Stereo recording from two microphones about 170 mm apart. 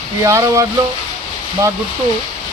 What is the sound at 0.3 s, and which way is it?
Speech, 15° right (ahead or behind).